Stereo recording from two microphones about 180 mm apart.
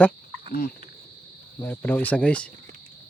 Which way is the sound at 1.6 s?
10° left (ahead or behind).